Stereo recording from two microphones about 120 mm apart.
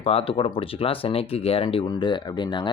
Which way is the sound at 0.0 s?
55° left (ahead or behind).